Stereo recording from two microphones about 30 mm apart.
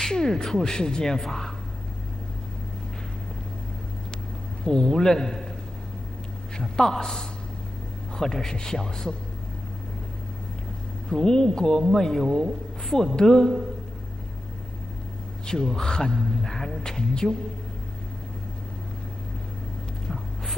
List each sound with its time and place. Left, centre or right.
0.1 s speech: left
4.6 s speech: left
6.6 s a man's voice: centre
11.1 s a man's voice: left
15.4 s a man's voice: left